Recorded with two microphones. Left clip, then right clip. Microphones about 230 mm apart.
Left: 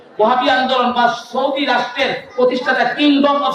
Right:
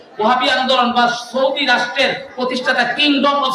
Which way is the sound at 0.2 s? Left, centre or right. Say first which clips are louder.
Left 1 dB; right.